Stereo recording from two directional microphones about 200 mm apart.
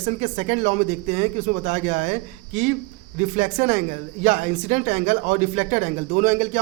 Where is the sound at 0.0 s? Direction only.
35° right (ahead or behind).